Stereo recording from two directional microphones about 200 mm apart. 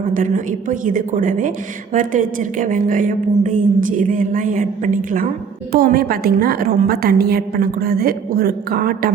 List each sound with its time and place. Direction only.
0.1 s a woman's voice: 40° right (ahead or behind)